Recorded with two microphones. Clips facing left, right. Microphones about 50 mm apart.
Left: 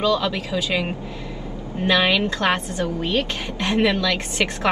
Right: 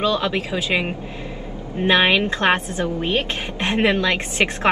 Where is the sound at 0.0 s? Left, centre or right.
Right.